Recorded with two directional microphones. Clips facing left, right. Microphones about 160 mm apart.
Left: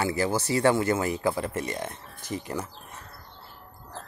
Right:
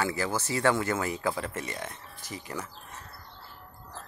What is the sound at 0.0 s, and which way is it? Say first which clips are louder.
Speech: left 4 dB; 35° left (ahead or behind).